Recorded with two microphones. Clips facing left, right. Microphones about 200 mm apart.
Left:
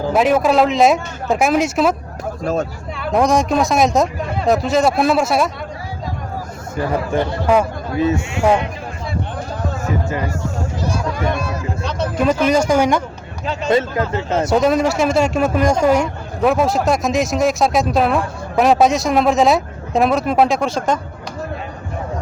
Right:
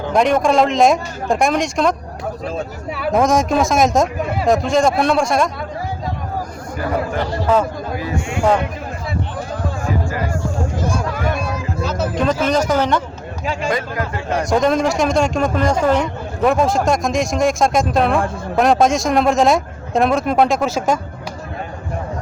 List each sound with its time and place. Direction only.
0.1 s speech: 5° left (ahead or behind)
2.4 s speech: 45° left (ahead or behind)
3.0 s speech: centre (ahead or behind)
7.9 s speech: 25° left (ahead or behind)
8.4 s speech: 10° left (ahead or behind)
10.1 s music: 20° left (ahead or behind)
10.8 s a sound: 50° right (ahead or behind)
11.8 s a sound: 5° right (ahead or behind)
12.1 s speech: 10° left (ahead or behind)
13.4 s speech: 10° right (ahead or behind)
13.7 s speech: 25° left (ahead or behind)
14.4 s speech: 5° left (ahead or behind)